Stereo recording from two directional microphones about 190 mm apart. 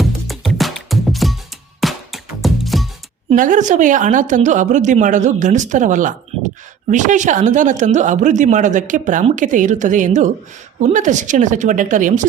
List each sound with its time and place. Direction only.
0.0 s music: centre (ahead or behind)
3.2 s a woman's voice: 45° right (ahead or behind)